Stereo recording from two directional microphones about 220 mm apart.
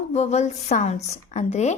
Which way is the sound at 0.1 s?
30° left (ahead or behind).